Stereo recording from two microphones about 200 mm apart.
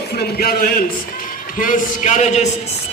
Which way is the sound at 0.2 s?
50° left (ahead or behind).